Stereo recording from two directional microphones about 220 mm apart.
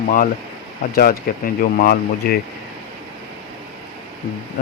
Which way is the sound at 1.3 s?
40° left (ahead or behind).